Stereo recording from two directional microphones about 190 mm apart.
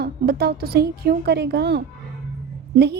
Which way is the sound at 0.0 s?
55° right (ahead or behind).